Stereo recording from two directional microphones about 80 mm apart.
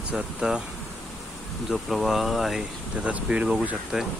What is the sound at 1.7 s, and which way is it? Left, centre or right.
Speech, centre.